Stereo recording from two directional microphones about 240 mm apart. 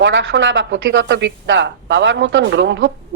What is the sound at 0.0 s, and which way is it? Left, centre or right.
A woman's voice, right.